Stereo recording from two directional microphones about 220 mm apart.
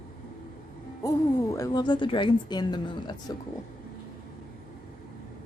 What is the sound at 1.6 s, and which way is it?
Speech, 15° left (ahead or behind).